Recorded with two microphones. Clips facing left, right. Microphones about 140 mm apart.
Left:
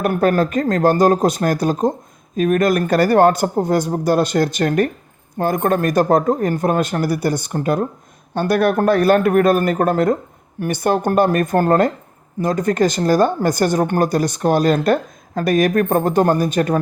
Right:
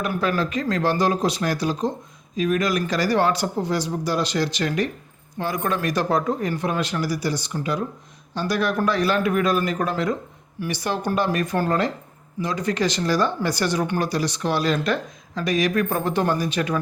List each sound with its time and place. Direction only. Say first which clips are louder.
0.0 s speech: left 7 dB; 50° left (ahead or behind)